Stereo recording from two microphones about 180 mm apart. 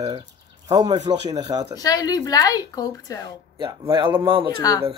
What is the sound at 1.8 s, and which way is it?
A woman's voice, 20° left (ahead or behind).